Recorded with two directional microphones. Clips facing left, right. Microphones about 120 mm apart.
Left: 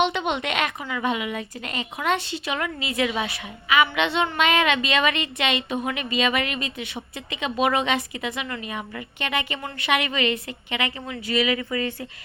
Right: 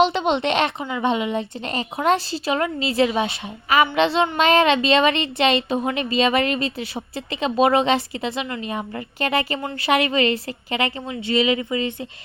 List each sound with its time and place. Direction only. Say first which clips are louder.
0.0 s speech: right 5 dB; 30° right (ahead or behind)